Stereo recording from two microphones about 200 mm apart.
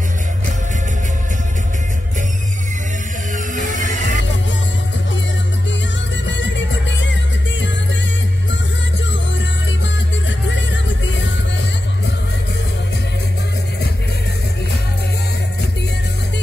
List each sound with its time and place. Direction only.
3.3 s music: 40° right (ahead or behind)
6.2 s music: 65° left (ahead or behind)
10.5 s music: 65° left (ahead or behind)